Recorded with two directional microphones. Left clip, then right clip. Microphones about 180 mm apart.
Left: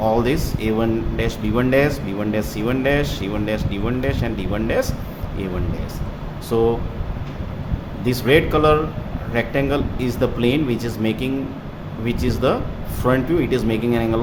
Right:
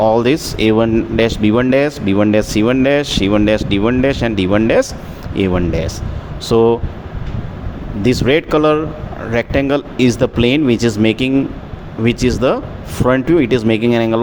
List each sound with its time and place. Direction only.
0.0 s speech: 45° right (ahead or behind)
8.0 s speech: 45° right (ahead or behind)